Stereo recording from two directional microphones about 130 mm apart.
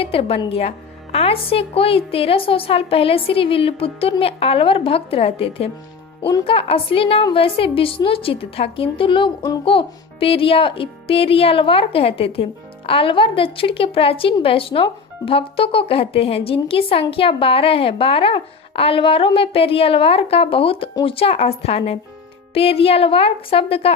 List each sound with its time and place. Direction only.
0.0 s a woman's voice: 45° left (ahead or behind)